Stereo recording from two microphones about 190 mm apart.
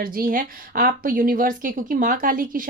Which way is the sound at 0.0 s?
50° right (ahead or behind).